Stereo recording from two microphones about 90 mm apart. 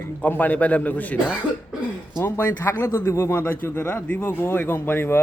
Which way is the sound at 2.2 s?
30° left (ahead or behind).